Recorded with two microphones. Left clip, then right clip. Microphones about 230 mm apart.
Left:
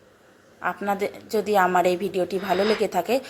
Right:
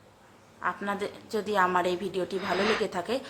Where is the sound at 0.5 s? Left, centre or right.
Centre.